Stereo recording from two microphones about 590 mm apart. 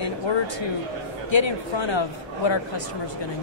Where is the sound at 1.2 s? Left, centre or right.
Left.